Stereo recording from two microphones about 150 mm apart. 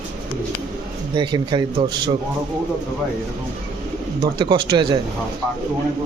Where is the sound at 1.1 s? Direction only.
30° right (ahead or behind).